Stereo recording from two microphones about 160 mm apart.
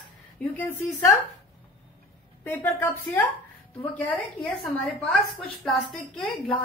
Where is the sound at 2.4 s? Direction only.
15° left (ahead or behind).